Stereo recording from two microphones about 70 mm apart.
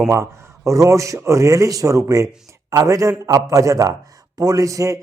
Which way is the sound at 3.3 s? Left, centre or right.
Right.